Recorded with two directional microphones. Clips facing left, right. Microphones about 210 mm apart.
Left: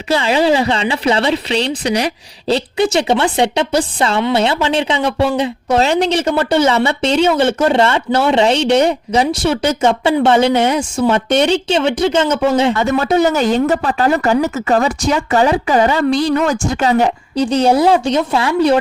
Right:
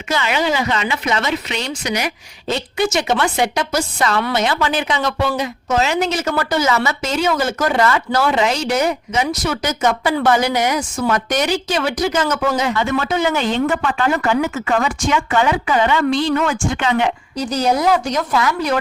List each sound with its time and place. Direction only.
0.1 s speech: 30° left (ahead or behind)
12.7 s speech: 40° left (ahead or behind)